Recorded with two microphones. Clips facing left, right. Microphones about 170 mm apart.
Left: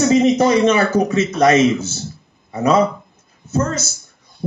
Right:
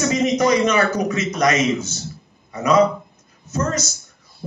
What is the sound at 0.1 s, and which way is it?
Speech, 30° left (ahead or behind).